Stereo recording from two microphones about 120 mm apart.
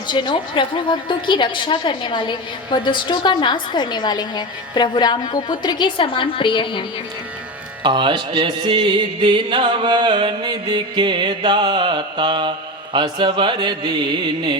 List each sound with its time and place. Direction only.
0.1 s a woman's voice: 40° left (ahead or behind)
7.9 s music: 40° right (ahead or behind)